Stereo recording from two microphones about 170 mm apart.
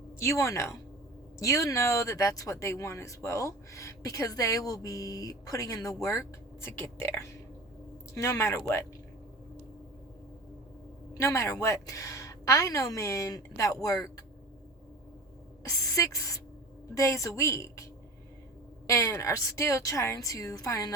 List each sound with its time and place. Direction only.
0.2 s a woman's voice: 15° left (ahead or behind)
11.2 s speech: 15° left (ahead or behind)
15.6 s a woman's voice: 20° left (ahead or behind)
18.9 s speech: 15° left (ahead or behind)